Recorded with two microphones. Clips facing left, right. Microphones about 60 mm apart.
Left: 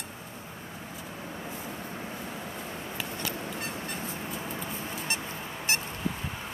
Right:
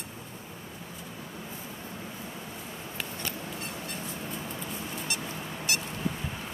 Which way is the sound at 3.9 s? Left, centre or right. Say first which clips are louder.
Left 1 dB; centre.